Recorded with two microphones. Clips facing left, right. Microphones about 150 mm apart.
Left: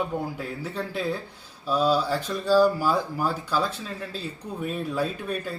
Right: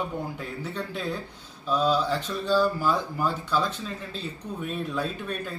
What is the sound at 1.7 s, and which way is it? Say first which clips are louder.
Speech: left 1 dB; 10° left (ahead or behind).